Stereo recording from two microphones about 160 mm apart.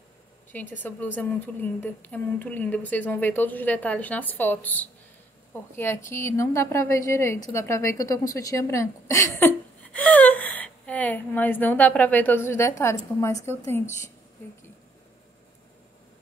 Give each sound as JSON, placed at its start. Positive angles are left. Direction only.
{"t": 0.5, "sound": "a woman's voice", "side_deg": 10}